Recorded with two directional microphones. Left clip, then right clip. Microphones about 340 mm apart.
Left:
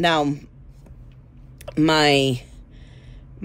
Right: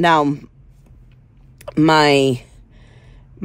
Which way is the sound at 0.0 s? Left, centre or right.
Centre.